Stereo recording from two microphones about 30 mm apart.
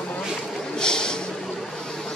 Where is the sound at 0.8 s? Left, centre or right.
Left.